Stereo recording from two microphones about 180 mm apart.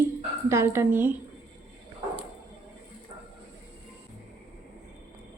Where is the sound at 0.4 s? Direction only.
15° right (ahead or behind).